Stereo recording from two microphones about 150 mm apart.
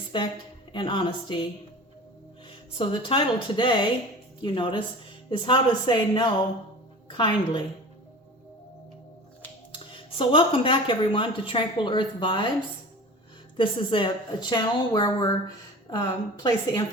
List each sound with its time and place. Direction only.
0.1 s a woman's voice: 35° left (ahead or behind)
2.7 s a woman's voice: 35° left (ahead or behind)
9.7 s a woman's voice: 35° left (ahead or behind)
13.6 s a woman's voice: 35° left (ahead or behind)